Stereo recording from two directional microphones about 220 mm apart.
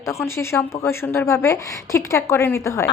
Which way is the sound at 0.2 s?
10° left (ahead or behind).